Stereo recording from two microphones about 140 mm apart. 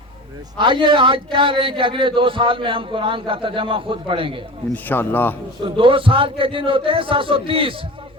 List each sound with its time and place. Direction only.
0.5 s a man's voice: 35° right (ahead or behind)
4.7 s a man's voice: 15° left (ahead or behind)
5.6 s a man's voice: 40° right (ahead or behind)